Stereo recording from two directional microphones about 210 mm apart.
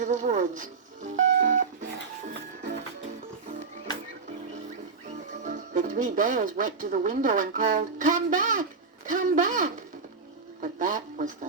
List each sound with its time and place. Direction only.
0.0 s music: 35° right (ahead or behind)
5.4 s speech: 35° right (ahead or behind)